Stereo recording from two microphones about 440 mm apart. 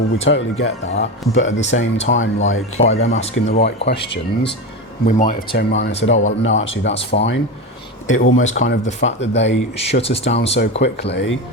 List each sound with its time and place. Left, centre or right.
0.3 s speech: left
2.7 s speech: centre
6.9 s speech: centre
8.0 s speech: left
9.7 s speech: centre